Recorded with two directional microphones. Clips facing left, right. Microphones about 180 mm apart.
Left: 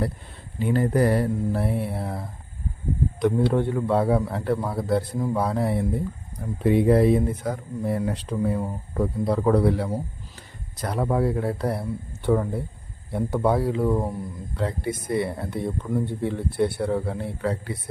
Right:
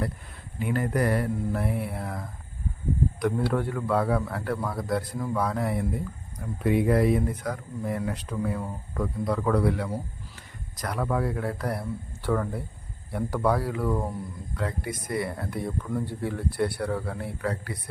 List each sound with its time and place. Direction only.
0.6 s speech: 30° left (ahead or behind)